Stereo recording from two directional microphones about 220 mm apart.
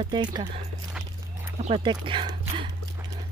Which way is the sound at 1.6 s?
20° right (ahead or behind).